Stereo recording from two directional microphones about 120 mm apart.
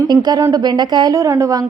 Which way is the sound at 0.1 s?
35° right (ahead or behind).